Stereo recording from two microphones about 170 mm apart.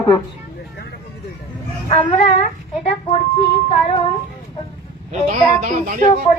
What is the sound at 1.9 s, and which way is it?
Child singing, 40° left (ahead or behind).